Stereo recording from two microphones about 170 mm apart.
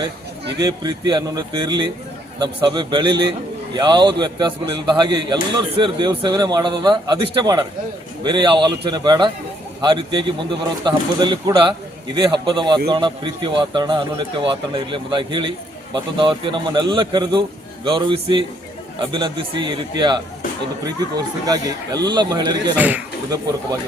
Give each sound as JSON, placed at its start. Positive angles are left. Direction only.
{"t": 0.6, "sound": "a man's voice", "side_deg": -25}
{"t": 22.8, "sound": "speech", "side_deg": -10}